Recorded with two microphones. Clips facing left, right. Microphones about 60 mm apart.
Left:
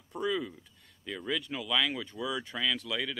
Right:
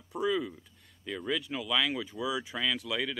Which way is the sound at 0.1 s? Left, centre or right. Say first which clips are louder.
Right 2 dB; centre.